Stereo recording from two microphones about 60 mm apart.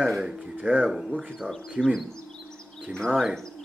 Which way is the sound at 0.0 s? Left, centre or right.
Centre.